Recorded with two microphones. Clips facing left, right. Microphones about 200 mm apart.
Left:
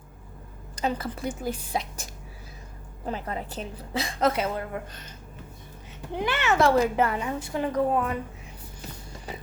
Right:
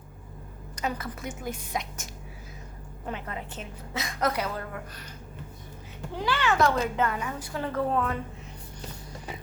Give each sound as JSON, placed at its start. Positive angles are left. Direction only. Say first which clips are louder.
{"t": 0.8, "sound": "a woman's voice", "louder": "left 4 dB", "side_deg": 30}
{"t": 3.1, "sound": "a woman's voice", "louder": "left 4 dB", "side_deg": 35}
{"t": 6.1, "sound": "a woman's voice", "louder": "left 1 dB", "side_deg": 20}